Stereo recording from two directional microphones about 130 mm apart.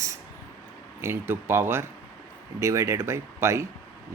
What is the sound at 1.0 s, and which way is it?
Speech, 15° right (ahead or behind).